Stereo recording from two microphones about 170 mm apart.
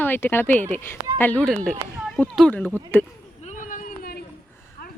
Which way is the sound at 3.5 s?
50° left (ahead or behind).